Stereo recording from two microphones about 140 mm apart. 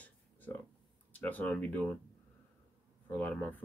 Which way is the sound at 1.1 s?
10° left (ahead or behind).